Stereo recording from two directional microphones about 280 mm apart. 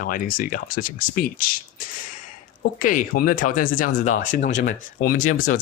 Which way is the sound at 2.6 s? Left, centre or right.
Left.